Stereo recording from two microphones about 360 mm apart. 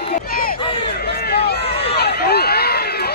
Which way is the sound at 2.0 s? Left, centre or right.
Left.